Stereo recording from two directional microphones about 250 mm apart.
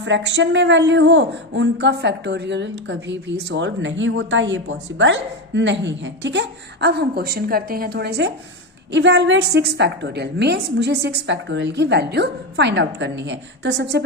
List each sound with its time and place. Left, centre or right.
0.0 s speech: right